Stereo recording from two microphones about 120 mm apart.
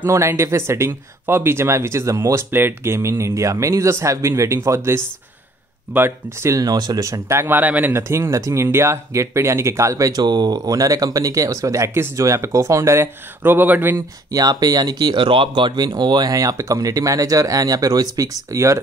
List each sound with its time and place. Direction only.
0.0 s speech: 20° right (ahead or behind)
14.3 s speech: 35° right (ahead or behind)